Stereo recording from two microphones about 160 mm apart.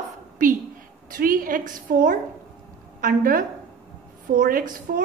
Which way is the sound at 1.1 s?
60° right (ahead or behind).